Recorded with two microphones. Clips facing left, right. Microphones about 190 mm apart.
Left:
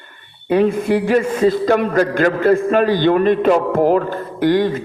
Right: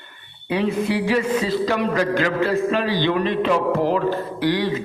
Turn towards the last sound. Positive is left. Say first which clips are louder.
# left 6 dB
turn(degrees=50)  # may be behind; listen again after turning